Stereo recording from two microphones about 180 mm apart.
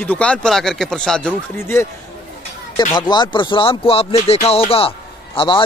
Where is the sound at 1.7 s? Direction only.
15° left (ahead or behind).